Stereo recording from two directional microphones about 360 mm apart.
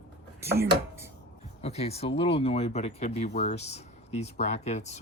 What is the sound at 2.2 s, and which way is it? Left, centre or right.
Speech, centre.